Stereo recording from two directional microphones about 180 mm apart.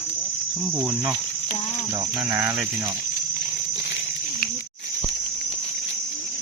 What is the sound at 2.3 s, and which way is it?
Cricket, 10° right (ahead or behind).